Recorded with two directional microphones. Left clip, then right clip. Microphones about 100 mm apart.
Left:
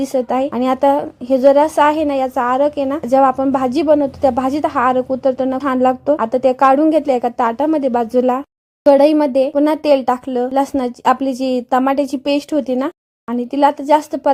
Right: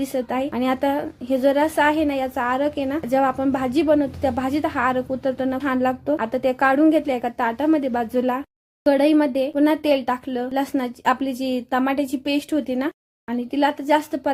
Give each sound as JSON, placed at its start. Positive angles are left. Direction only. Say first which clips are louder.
{"t": 0.0, "sound": "a woman's voice", "louder": "left 7 dB", "side_deg": 45}